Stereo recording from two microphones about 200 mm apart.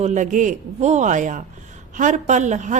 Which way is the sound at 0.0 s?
35° right (ahead or behind).